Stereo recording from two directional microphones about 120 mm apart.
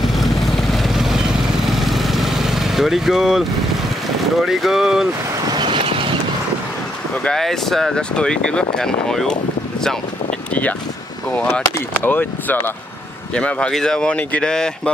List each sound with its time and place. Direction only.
0.1 s vehicle: centre (ahead or behind)
4.4 s speech: centre (ahead or behind)
5.5 s vehicle: 40° right (ahead or behind)
7.2 s speech: 5° left (ahead or behind)
11.5 s speech: 15° left (ahead or behind)